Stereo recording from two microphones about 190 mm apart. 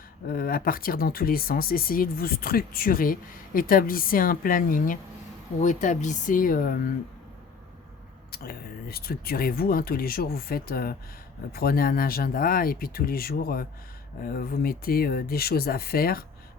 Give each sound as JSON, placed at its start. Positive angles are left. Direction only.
{"t": 0.3, "sound": "speech", "side_deg": 50}
{"t": 8.3, "sound": "speech", "side_deg": 55}